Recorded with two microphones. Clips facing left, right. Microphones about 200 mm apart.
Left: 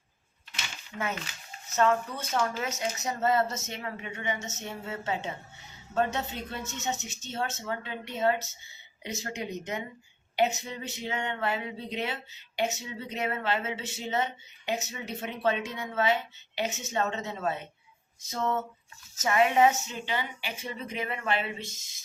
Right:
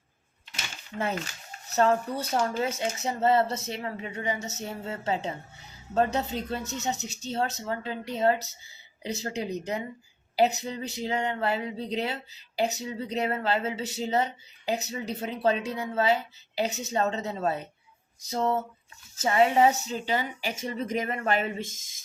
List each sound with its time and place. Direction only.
0.9 s speech: 35° right (ahead or behind)